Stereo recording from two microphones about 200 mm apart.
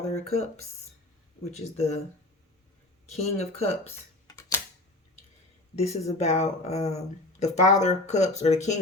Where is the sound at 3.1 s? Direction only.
35° left (ahead or behind).